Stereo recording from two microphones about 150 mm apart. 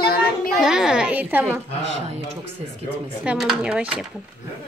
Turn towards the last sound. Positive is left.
turn(degrees=-5)  # may be behind; listen again after turning